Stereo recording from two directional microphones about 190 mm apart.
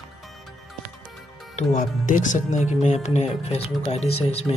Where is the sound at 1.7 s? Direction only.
45° left (ahead or behind).